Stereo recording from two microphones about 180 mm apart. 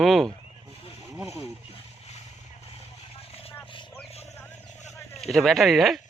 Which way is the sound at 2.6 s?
35° left (ahead or behind).